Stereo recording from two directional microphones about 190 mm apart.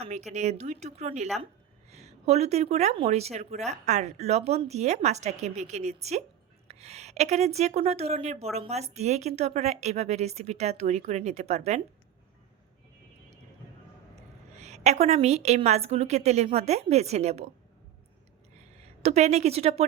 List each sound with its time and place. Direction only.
0.0 s speech: 35° right (ahead or behind)
14.5 s speech: 35° right (ahead or behind)
19.0 s speech: 35° right (ahead or behind)